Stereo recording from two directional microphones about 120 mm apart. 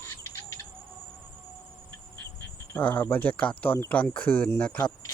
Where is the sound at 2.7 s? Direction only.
15° left (ahead or behind).